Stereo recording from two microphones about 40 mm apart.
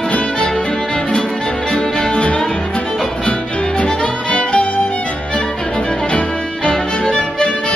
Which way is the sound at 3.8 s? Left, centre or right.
Left.